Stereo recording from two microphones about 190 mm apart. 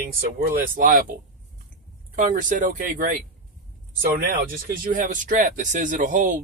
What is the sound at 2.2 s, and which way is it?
Speech, 45° right (ahead or behind).